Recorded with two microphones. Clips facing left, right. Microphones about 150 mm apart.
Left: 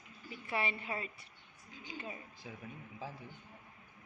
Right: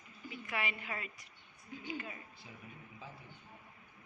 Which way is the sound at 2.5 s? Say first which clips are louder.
Left 8 dB; 85° left.